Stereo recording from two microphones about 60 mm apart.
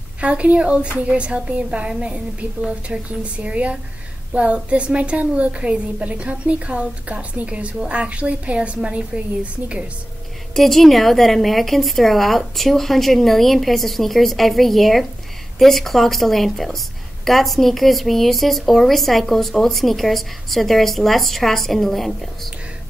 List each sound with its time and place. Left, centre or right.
0.2 s a woman's voice: right
10.5 s a woman's voice: centre